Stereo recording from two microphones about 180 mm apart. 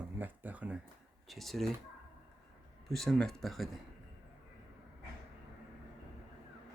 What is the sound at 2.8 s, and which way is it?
Speech, centre (ahead or behind).